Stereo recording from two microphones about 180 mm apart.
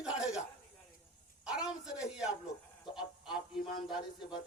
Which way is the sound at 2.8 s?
25° left (ahead or behind).